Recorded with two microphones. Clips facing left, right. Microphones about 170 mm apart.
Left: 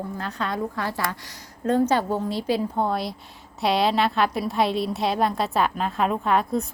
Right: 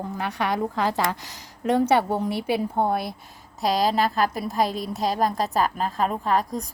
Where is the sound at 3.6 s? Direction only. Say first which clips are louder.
Left 1 dB; 40° right (ahead or behind).